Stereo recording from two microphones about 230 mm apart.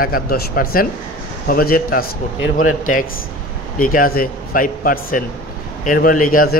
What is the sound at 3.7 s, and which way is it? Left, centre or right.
A man's voice, left.